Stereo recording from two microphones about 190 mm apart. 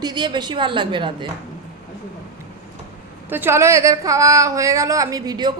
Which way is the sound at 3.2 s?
10° right (ahead or behind).